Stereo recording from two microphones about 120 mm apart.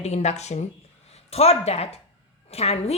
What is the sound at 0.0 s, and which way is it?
Speech, 65° left (ahead or behind).